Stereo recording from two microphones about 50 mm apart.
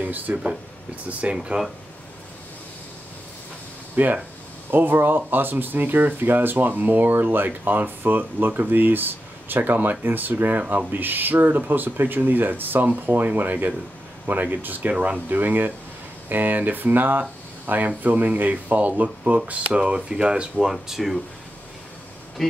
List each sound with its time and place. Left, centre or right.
0.0 s speech: right
3.9 s speech: right; by 20.7 s centre
20.7 s speech: centre
22.4 s speech: centre